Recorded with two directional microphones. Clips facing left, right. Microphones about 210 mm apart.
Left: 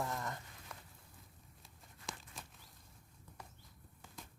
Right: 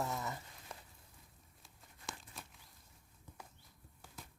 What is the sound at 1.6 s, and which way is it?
Crumpling, centre (ahead or behind).